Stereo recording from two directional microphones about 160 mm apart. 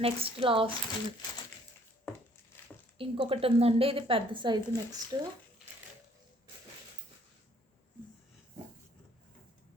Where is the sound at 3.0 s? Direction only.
35° right (ahead or behind).